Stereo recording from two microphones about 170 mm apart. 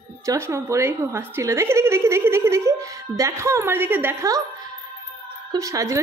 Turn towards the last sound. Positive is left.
turn(degrees=-20)  # may be behind; listen again after turning